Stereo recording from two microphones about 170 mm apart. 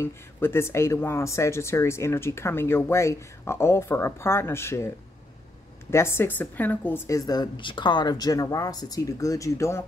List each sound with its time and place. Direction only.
0.0 s a woman's voice: 15° left (ahead or behind)